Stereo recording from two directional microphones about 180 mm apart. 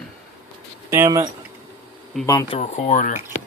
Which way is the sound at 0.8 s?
15° right (ahead or behind).